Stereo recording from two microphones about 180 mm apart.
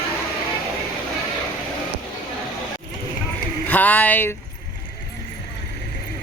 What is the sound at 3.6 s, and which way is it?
Speech, 10° left (ahead or behind).